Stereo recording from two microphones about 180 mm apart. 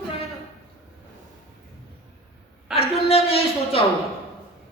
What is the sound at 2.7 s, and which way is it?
A woman's voice, 35° left (ahead or behind).